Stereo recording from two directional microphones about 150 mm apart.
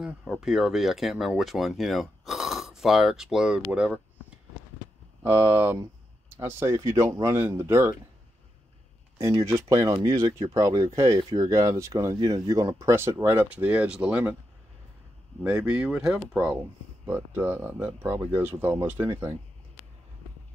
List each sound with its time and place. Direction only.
0.0 s speech: centre (ahead or behind)
5.2 s speech: 15° right (ahead or behind)
9.2 s speech: 20° right (ahead or behind)
15.4 s speech: 5° right (ahead or behind)